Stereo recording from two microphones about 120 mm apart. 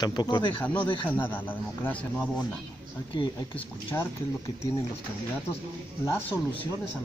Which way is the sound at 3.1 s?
40° left (ahead or behind).